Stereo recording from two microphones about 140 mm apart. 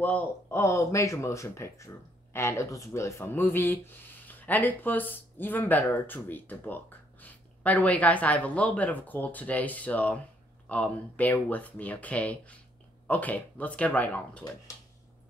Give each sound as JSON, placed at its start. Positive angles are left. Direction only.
{"t": 0.0, "sound": "speech", "side_deg": 10}